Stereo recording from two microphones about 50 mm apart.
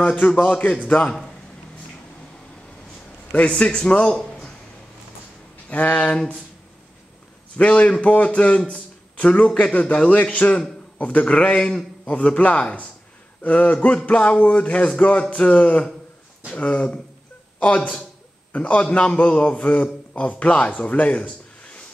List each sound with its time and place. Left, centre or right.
0.0 s a man's voice: left
3.4 s a man's voice: left
5.7 s a man's voice: left
7.5 s a man's voice: left